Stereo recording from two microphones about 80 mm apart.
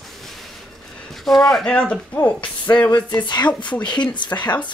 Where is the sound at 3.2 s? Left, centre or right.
Left.